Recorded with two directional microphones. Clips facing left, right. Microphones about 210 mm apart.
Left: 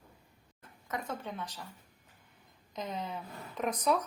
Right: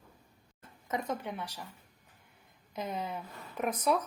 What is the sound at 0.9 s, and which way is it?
Speech, 20° right (ahead or behind).